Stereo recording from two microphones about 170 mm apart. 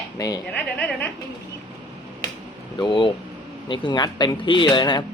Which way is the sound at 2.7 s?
30° left (ahead or behind).